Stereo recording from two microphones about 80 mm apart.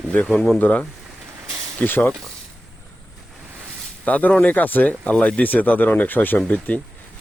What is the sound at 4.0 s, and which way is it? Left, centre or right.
Speech, centre.